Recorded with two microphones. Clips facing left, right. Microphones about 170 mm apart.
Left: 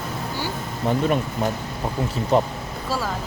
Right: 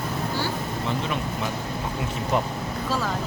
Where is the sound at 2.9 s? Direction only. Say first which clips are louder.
Left 1 dB; 10° left (ahead or behind).